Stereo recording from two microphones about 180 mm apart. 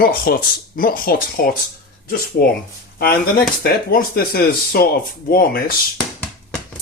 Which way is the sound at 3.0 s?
60° left (ahead or behind).